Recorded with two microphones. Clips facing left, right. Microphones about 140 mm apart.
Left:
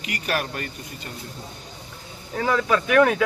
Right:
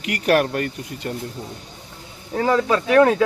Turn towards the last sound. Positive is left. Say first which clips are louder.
# right 3 dB
turn(degrees=-30)  # may be behind; listen again after turning